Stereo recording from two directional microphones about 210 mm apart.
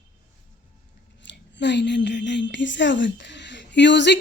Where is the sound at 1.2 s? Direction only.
55° left (ahead or behind).